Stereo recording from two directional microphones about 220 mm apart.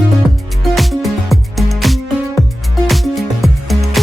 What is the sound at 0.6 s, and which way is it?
Music, centre (ahead or behind).